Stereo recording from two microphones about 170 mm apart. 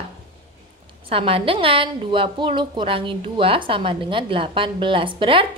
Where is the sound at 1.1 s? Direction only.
35° right (ahead or behind).